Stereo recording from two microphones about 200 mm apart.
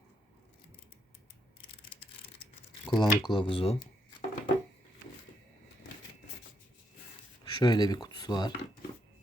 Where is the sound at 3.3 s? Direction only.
25° left (ahead or behind).